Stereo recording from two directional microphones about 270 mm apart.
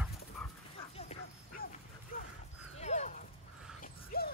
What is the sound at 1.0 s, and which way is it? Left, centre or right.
Bow-wow, left.